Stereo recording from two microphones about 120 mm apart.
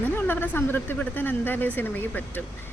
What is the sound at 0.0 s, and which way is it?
A woman's voice, 15° left (ahead or behind).